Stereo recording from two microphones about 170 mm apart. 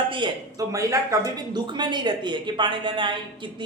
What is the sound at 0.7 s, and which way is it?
Speech, 20° right (ahead or behind).